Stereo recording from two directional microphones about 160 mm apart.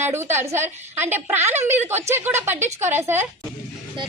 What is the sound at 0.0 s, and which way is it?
A woman's voice, 15° right (ahead or behind).